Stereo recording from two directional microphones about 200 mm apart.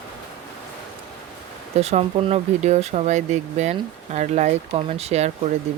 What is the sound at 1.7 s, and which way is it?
Speech, 35° right (ahead or behind).